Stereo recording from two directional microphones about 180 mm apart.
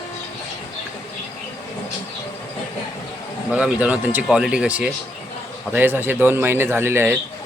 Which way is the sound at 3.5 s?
5° right (ahead or behind).